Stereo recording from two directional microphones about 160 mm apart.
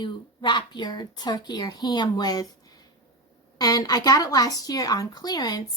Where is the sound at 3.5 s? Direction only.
25° left (ahead or behind).